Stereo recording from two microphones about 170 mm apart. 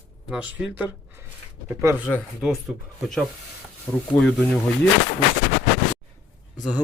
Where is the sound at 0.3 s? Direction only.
5° right (ahead or behind).